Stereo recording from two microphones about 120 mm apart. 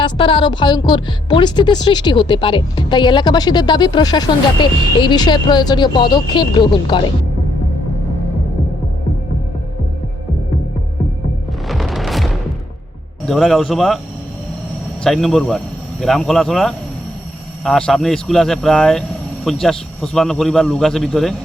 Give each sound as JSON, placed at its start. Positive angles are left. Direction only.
{"t": 0.0, "sound": "a woman's voice", "side_deg": 45}
{"t": 11.7, "sound": "music", "side_deg": 0}
{"t": 13.2, "sound": "speech", "side_deg": 0}
{"t": 15.0, "sound": "speech", "side_deg": 0}